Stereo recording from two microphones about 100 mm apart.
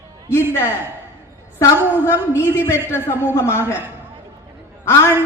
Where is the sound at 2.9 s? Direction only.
25° left (ahead or behind).